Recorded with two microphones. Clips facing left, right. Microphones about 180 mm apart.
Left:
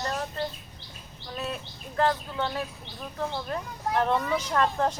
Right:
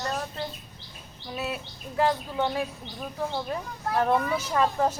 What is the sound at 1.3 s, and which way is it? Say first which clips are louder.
Speech: right 2 dB; 5° right (ahead or behind).